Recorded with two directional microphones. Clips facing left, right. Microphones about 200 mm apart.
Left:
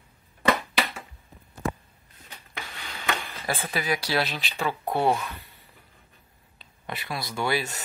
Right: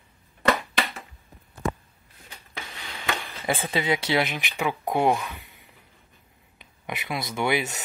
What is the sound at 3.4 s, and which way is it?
Speech, 20° right (ahead or behind).